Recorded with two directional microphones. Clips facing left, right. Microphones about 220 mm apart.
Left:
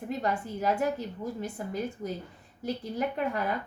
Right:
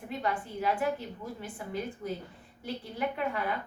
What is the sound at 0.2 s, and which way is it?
A woman's voice, 40° left (ahead or behind).